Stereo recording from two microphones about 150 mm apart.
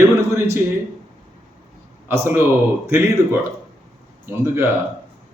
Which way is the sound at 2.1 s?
15° right (ahead or behind).